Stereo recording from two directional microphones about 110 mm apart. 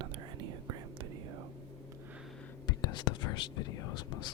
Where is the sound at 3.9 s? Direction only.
45° left (ahead or behind).